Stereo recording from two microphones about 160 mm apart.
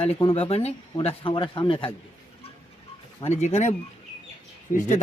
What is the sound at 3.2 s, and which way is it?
Speech, 45° left (ahead or behind).